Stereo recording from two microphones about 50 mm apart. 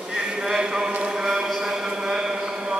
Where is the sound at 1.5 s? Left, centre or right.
Centre.